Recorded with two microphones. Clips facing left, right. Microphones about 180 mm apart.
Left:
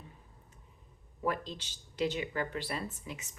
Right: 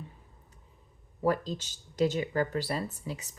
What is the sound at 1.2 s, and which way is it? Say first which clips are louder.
A woman's voice: right 6 dB; 40° right (ahead or behind).